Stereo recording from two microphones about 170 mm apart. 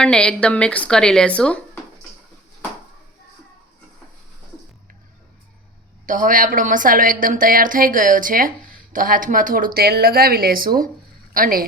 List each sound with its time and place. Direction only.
0.0 s speech: 5° left (ahead or behind)
6.1 s a woman's voice: 50° right (ahead or behind)